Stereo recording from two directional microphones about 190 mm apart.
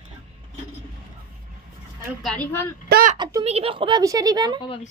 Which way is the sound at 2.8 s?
50° right (ahead or behind).